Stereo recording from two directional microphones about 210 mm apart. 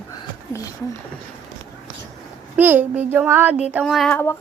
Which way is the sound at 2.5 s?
10° right (ahead or behind).